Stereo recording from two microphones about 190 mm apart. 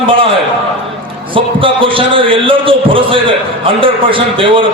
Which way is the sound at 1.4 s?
25° right (ahead or behind).